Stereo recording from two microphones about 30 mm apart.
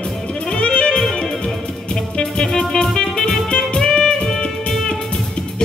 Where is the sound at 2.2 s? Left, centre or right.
Left.